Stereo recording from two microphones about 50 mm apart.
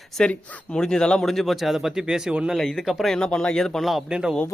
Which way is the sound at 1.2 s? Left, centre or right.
Centre.